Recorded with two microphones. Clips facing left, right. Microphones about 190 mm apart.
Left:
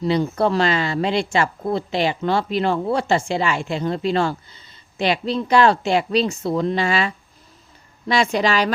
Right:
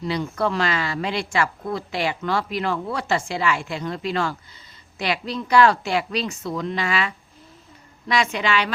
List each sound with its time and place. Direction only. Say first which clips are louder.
0.0 s a woman's voice: left 5 dB; 30° left (ahead or behind)